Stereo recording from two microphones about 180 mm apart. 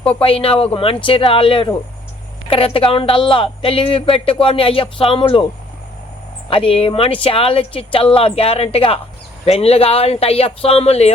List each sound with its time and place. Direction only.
0.1 s speech: 30° left (ahead or behind)
6.5 s speech: 30° left (ahead or behind)